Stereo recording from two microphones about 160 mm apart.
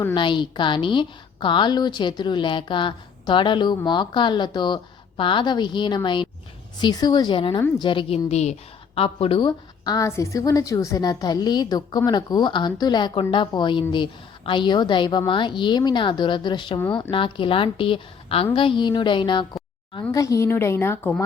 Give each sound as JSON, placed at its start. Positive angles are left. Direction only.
{"t": 0.1, "sound": "a woman's voice", "side_deg": 30}
{"t": 9.5, "sound": "a woman's voice", "side_deg": 25}
{"t": 20.1, "sound": "a woman's voice", "side_deg": 20}